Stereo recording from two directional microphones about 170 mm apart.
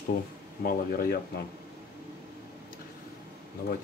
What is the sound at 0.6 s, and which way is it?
Speech, 55° left (ahead or behind).